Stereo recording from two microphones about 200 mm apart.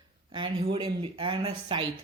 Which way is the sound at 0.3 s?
25° right (ahead or behind).